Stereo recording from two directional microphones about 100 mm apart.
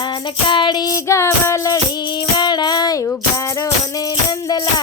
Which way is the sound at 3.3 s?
35° left (ahead or behind).